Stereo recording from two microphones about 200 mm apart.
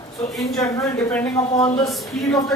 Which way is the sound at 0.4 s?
15° left (ahead or behind).